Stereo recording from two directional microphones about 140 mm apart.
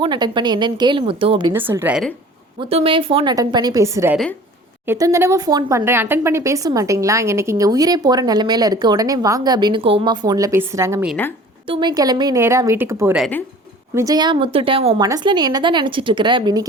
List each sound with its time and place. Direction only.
0.0 s speech: 35° right (ahead or behind)
1.5 s a woman's voice: 15° right (ahead or behind)
2.6 s speech: 40° right (ahead or behind)
3.3 s speech: 25° right (ahead or behind)
11.7 s speech: 30° right (ahead or behind)
14.9 s speech: 25° right (ahead or behind)